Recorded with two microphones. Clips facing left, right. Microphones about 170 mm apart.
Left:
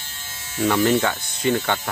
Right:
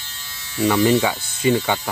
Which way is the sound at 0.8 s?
5° right (ahead or behind).